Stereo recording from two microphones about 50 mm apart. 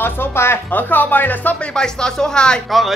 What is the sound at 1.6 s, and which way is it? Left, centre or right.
Speech, centre.